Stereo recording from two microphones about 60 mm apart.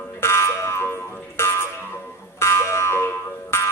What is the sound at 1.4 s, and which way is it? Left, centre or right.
Music, left.